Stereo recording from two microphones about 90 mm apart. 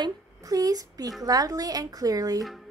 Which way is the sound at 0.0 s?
40° right (ahead or behind).